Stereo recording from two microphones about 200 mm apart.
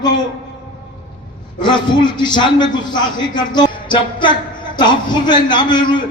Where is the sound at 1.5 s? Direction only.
20° left (ahead or behind).